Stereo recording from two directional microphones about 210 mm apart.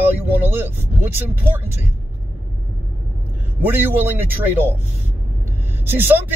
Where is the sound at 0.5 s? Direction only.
10° right (ahead or behind).